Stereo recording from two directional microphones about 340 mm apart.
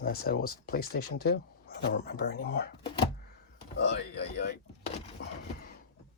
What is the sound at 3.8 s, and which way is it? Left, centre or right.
Speech, left.